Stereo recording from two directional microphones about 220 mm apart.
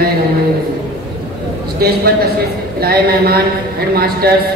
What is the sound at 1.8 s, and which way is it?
A man's voice, 45° right (ahead or behind).